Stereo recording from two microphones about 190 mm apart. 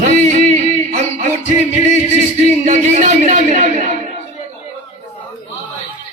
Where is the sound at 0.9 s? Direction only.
40° right (ahead or behind).